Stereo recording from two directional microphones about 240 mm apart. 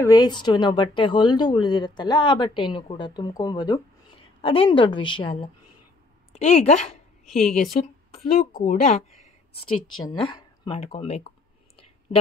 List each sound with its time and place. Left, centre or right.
0.0 s speech: centre
7.2 s a woman's voice: centre
7.7 s speech: left
9.6 s speech: left
10.0 s speech: centre